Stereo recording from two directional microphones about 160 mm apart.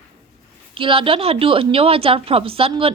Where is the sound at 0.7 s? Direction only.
35° right (ahead or behind).